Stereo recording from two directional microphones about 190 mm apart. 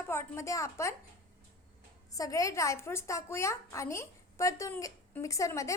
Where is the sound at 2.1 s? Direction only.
20° left (ahead or behind).